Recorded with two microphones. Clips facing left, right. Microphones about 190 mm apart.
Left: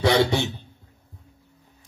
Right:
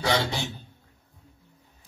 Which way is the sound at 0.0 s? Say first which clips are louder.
Left 7 dB; 70° left (ahead or behind).